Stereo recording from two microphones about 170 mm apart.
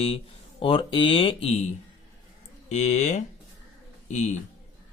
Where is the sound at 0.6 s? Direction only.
30° left (ahead or behind).